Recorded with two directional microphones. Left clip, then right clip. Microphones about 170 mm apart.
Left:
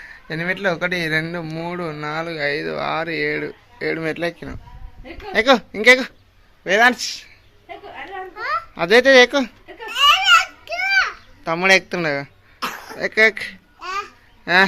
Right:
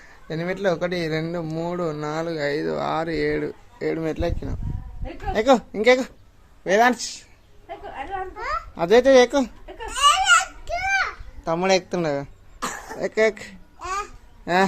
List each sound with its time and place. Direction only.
0.0 s a man's voice: 10° right (ahead or behind)
8.4 s babbling: 10° right (ahead or behind)